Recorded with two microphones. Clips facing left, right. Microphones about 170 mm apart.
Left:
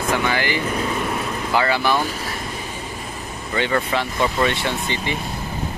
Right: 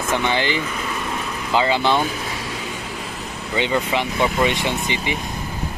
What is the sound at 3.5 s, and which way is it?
Speech, 15° right (ahead or behind).